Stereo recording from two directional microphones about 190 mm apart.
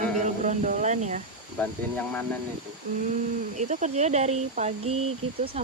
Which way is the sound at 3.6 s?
40° right (ahead or behind).